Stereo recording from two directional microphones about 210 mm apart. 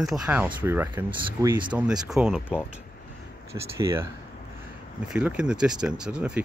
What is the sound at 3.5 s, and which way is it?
Speech, 15° right (ahead or behind).